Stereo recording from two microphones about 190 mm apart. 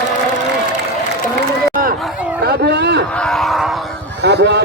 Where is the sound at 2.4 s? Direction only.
60° right (ahead or behind).